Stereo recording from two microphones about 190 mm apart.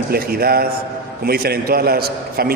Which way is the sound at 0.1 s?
55° right (ahead or behind).